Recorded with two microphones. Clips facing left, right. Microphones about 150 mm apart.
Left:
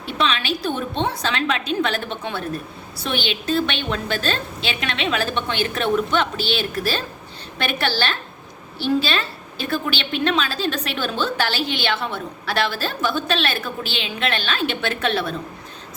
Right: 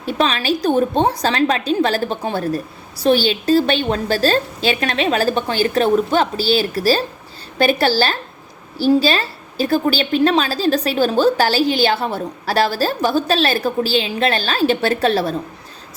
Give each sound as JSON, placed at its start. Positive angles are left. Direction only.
{"t": 0.0, "sound": "a woman's voice", "side_deg": -40}